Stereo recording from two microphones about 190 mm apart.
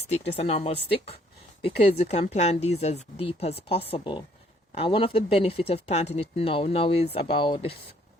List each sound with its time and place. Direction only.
0.1 s speech: 30° left (ahead or behind)